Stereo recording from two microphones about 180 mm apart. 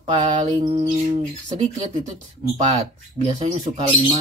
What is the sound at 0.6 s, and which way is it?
Music, 25° right (ahead or behind).